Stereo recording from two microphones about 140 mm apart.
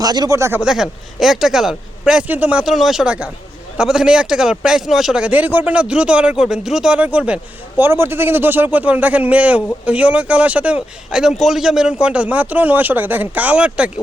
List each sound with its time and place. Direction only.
0.0 s speech: 30° right (ahead or behind)
0.6 s a man's voice: 5° right (ahead or behind)